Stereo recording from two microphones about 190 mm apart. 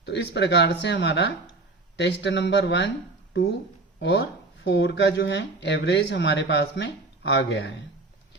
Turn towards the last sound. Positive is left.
turn(degrees=65)  # may be behind; listen again after turning